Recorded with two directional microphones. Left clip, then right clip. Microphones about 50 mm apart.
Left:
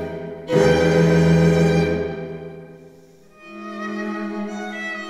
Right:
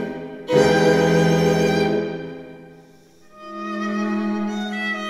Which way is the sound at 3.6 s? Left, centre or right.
Right.